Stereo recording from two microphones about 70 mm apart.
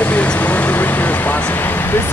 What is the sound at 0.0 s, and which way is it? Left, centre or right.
Vehicle, centre.